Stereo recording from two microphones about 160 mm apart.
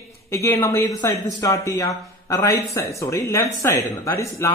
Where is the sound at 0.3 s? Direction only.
15° left (ahead or behind).